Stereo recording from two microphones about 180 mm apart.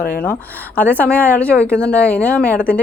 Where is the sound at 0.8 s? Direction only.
10° left (ahead or behind).